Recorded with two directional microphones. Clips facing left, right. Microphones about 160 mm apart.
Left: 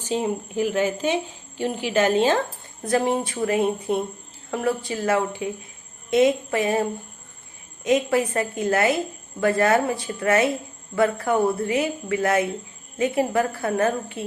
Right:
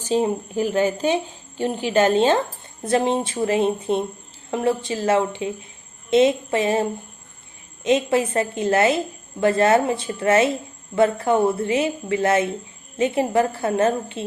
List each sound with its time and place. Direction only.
0.1 s a woman's voice: 35° right (ahead or behind)
7.9 s a woman's voice: 25° right (ahead or behind)